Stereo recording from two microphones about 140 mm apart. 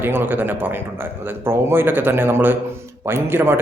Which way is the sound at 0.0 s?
15° right (ahead or behind).